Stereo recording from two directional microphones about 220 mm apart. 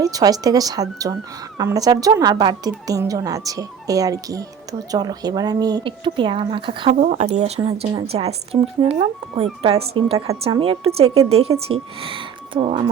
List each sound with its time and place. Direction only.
0.0 s speech: 15° right (ahead or behind)
7.0 s speech: 35° right (ahead or behind)